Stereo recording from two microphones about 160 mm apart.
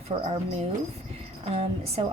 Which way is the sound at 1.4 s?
40° right (ahead or behind).